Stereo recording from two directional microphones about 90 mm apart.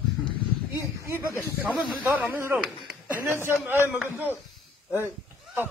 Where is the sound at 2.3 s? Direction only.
20° right (ahead or behind).